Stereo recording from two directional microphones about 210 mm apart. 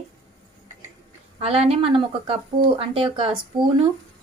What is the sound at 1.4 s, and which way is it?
A woman's voice, 25° right (ahead or behind).